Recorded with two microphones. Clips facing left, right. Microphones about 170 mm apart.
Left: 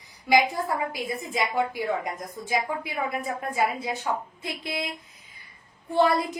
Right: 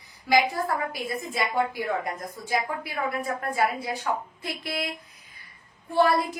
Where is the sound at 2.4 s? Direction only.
15° left (ahead or behind).